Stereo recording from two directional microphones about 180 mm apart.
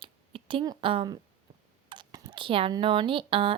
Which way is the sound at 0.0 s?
30° right (ahead or behind).